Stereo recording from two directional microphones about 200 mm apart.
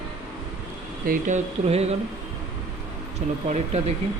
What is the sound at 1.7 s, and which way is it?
Speech, 30° right (ahead or behind).